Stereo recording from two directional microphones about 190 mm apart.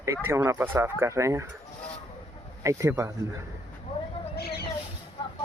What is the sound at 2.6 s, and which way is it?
Speech, 15° right (ahead or behind).